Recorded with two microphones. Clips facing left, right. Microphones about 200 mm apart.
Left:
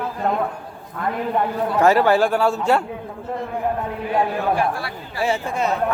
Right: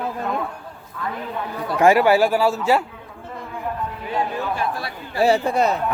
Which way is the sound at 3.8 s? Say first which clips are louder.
Left 4 dB; 60° left (ahead or behind).